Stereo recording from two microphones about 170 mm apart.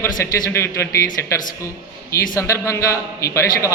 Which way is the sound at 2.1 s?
20° left (ahead or behind).